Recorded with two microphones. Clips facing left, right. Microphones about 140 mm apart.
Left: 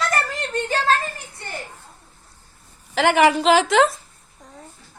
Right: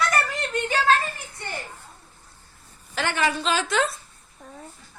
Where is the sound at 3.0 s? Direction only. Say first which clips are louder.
Left 9 dB; 90° left.